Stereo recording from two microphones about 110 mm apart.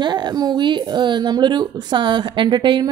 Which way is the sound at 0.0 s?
45° right (ahead or behind).